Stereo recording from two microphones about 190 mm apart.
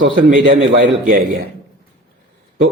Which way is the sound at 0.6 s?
80° right.